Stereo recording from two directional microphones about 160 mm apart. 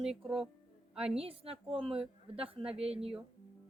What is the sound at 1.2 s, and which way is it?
A woman's voice, 40° right (ahead or behind).